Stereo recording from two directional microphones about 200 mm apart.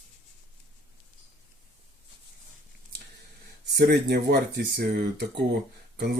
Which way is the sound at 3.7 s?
55° right (ahead or behind).